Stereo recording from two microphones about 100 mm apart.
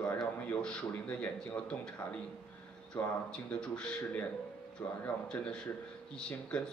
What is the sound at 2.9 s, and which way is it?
Speech, 10° left (ahead or behind).